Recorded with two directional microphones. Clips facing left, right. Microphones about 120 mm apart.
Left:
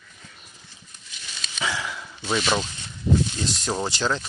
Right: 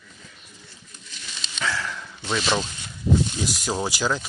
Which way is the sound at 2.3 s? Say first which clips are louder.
Left 1 dB; 5° left (ahead or behind).